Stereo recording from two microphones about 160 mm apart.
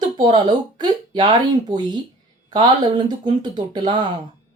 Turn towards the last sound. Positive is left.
turn(degrees=-30)  # may be behind; listen again after turning